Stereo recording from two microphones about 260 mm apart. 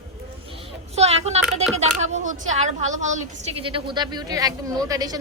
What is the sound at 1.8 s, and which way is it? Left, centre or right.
A woman's voice, right.